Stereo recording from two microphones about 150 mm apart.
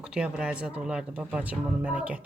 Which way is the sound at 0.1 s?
5° right (ahead or behind).